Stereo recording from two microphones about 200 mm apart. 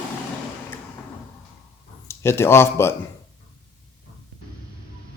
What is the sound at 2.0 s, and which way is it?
Speech, 10° left (ahead or behind).